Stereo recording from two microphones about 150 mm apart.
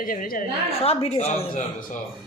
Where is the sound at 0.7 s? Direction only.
40° left (ahead or behind).